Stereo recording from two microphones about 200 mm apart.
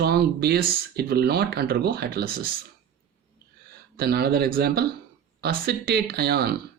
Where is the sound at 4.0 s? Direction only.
50° right (ahead or behind).